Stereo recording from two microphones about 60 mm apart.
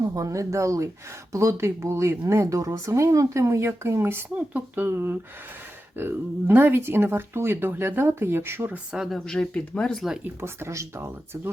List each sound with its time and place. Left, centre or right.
0.1 s speech: right
2.8 s speech: right
4.4 s speech: right
4.9 s speech: right
8.9 s speech: centre
9.1 s speech: centre
10.2 s speech: right